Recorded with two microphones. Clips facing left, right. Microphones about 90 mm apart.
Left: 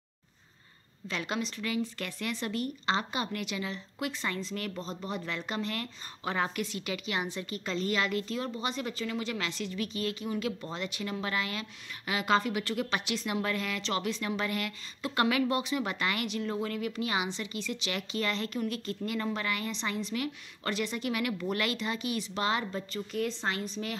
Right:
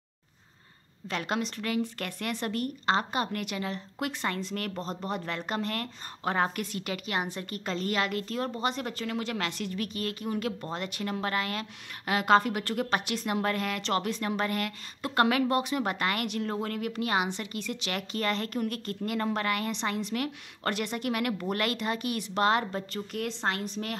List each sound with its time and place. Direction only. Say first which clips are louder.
1.0 s a woman's voice: right 3 dB; 50° right (ahead or behind)